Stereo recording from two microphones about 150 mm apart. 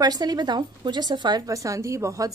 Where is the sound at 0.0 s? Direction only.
25° right (ahead or behind).